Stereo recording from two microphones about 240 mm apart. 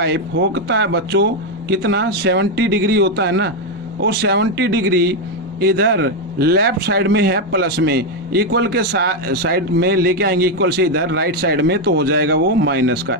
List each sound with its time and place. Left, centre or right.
0.0 s speech: right